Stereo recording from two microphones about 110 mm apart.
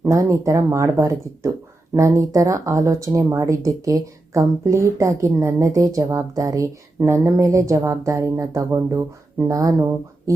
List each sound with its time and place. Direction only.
0.0 s speech: 30° right (ahead or behind)